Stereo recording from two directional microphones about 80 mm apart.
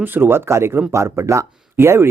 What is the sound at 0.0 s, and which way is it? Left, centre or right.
Speech, right.